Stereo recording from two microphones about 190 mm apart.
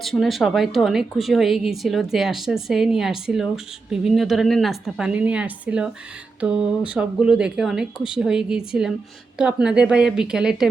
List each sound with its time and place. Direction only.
0.0 s a woman's voice: centre (ahead or behind)